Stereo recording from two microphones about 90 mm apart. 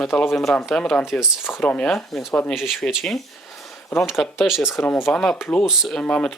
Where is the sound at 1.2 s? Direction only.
5° right (ahead or behind).